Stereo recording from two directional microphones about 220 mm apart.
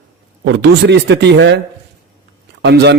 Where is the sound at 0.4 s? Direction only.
50° right (ahead or behind).